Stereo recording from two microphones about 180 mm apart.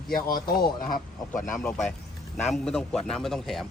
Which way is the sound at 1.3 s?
5° left (ahead or behind).